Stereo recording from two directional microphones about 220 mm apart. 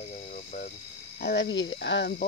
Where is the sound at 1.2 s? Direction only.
50° left (ahead or behind).